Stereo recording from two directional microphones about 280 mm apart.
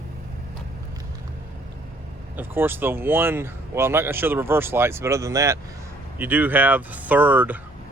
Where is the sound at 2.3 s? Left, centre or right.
Centre.